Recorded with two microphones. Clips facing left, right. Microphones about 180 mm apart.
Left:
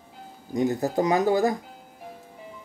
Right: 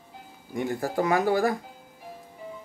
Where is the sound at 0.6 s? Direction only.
20° left (ahead or behind).